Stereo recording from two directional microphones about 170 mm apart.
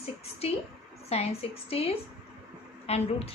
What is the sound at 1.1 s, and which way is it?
A woman's voice, 35° left (ahead or behind).